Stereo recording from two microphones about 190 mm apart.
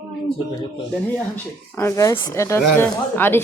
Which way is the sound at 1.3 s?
10° left (ahead or behind).